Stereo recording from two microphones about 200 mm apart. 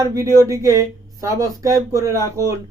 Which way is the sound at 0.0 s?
15° right (ahead or behind).